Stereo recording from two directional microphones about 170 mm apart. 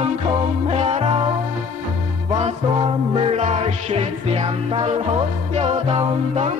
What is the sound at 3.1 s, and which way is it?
Music, 40° right (ahead or behind).